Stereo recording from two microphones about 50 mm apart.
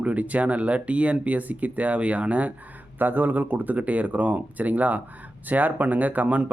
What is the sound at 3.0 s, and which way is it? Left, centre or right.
Speech, right.